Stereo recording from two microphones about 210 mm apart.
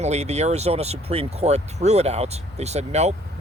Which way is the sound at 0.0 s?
30° right (ahead or behind).